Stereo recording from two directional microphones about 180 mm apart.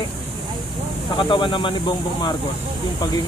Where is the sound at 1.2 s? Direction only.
30° left (ahead or behind).